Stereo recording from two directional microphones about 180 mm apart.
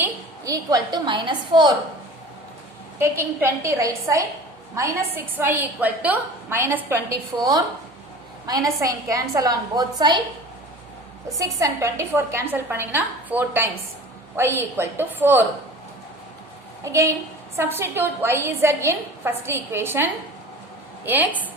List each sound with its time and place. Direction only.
0.0 s a woman's voice: 20° right (ahead or behind)
3.0 s a woman's voice: 15° right (ahead or behind)
11.3 s a woman's voice: 15° right (ahead or behind)
16.8 s a woman's voice: 15° right (ahead or behind)